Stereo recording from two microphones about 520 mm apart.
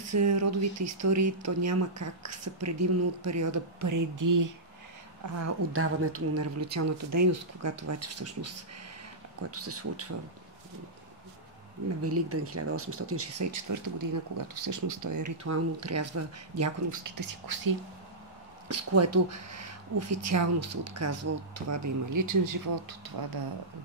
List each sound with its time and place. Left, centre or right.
0.0 s speech: right
12.0 s speech: right
18.7 s speech: right